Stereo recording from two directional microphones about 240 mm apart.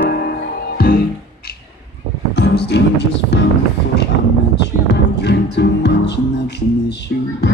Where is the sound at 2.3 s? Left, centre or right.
Left.